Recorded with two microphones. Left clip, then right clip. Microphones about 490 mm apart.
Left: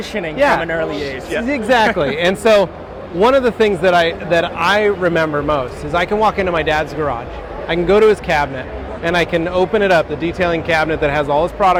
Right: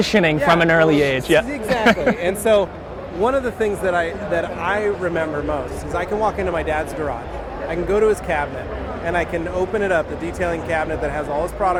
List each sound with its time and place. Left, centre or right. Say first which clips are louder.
0.0 s speech: even; right
1.5 s speech: left 4 dB; left
3.2 s speech: left 7 dB; left